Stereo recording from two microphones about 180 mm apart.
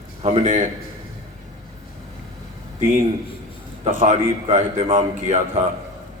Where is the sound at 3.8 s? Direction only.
40° right (ahead or behind).